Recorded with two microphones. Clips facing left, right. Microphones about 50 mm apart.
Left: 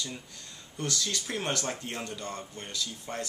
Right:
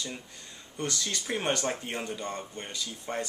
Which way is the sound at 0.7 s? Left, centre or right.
Centre.